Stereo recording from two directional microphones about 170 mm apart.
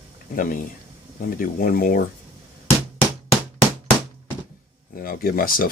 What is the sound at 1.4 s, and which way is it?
Speech, 55° left (ahead or behind).